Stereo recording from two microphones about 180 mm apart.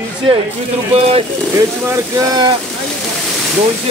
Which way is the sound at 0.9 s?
35° right (ahead or behind).